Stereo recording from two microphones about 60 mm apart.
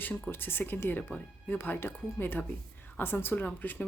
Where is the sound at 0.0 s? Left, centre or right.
Left.